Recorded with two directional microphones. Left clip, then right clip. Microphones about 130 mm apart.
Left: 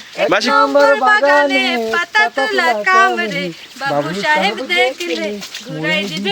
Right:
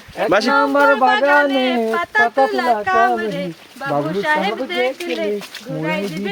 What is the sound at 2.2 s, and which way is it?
Speech, 50° right (ahead or behind).